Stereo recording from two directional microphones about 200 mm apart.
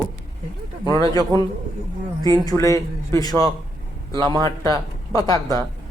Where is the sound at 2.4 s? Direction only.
15° left (ahead or behind).